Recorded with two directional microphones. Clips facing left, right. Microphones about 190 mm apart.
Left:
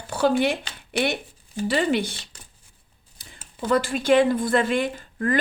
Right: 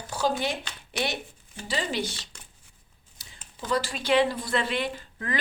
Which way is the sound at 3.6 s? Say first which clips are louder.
Left 6 dB; 55° left (ahead or behind).